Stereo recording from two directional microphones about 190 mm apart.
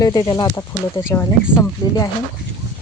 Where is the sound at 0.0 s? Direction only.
20° left (ahead or behind).